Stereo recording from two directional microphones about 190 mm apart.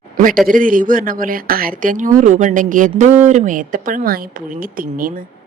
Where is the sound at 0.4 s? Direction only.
45° right (ahead or behind).